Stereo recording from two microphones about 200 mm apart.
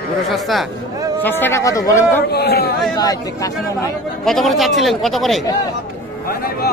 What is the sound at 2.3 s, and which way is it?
Speech, 55° left (ahead or behind).